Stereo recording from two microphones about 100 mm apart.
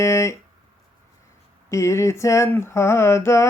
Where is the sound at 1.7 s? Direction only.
30° left (ahead or behind).